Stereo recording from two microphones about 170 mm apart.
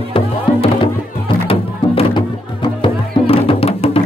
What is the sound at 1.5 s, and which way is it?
Music, 30° left (ahead or behind).